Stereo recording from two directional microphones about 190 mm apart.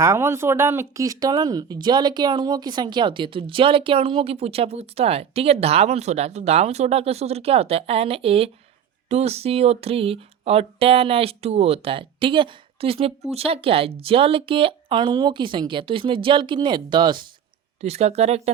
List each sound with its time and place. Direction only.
0.0 s speech: 15° right (ahead or behind); by 18.5 s 35° right (ahead or behind)